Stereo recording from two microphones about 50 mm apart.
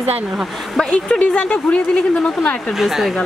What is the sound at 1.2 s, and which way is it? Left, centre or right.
Speech, left.